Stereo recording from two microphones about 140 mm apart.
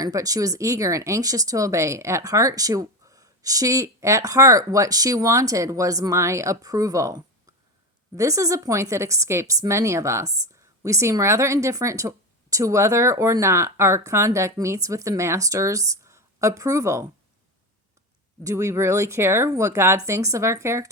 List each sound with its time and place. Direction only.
0.0 s speech: 25° right (ahead or behind)
18.4 s speech: 20° right (ahead or behind)